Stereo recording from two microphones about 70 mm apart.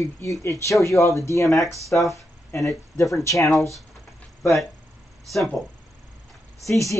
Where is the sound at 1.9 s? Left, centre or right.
Left.